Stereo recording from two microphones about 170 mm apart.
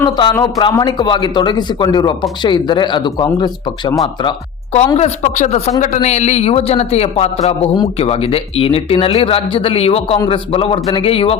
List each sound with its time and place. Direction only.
0.0 s speech: 30° left (ahead or behind)